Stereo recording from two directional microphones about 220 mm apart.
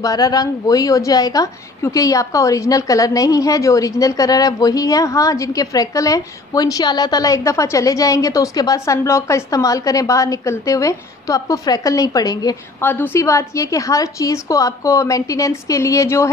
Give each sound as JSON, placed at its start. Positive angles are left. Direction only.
{"t": 0.0, "sound": "a woman's voice", "side_deg": 15}